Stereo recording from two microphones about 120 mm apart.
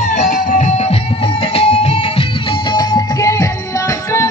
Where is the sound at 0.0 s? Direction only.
90° left; by 2.2 s 60° left (ahead or behind).